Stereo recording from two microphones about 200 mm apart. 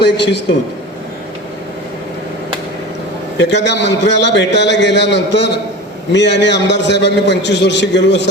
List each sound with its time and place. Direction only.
0.0 s a man's voice: 60° left (ahead or behind)
3.4 s a man's voice: 60° left (ahead or behind)